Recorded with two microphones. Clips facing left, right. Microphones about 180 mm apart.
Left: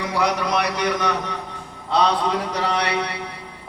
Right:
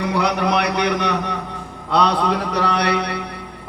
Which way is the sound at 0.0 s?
60° right (ahead or behind).